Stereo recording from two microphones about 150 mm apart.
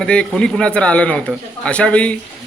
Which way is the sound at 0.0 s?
5° left (ahead or behind).